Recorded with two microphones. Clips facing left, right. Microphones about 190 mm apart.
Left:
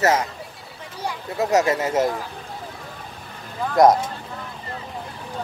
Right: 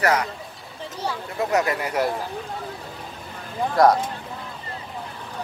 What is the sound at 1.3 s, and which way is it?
Speech, 25° left (ahead or behind).